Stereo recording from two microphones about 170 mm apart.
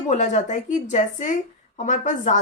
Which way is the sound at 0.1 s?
45° left (ahead or behind).